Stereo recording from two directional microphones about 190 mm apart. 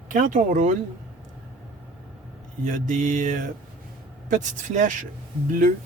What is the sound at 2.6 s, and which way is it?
Speech, 40° right (ahead or behind).